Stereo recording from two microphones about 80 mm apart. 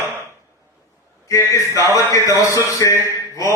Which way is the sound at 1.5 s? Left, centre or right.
Left.